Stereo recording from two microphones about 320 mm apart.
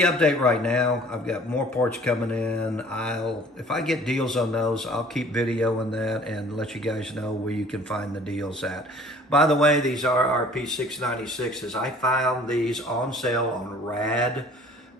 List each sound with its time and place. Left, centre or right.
0.0 s a man's voice: centre